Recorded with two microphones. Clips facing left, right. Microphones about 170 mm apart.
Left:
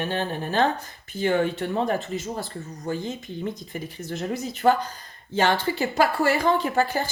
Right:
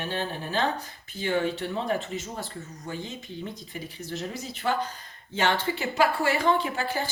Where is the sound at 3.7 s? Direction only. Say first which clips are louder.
Left 3 dB; 50° left (ahead or behind).